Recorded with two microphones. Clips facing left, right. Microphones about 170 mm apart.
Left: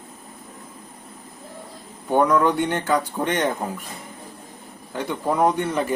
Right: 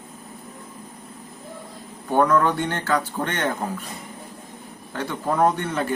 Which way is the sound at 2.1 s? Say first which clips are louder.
Left 1 dB; 15° left (ahead or behind).